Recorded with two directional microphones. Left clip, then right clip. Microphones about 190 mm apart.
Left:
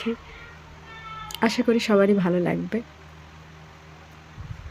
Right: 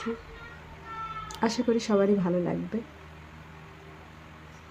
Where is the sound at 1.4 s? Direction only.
10° left (ahead or behind).